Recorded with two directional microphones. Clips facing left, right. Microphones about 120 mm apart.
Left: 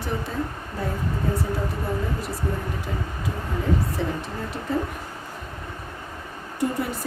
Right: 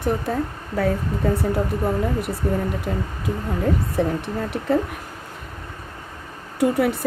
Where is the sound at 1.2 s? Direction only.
70° right (ahead or behind).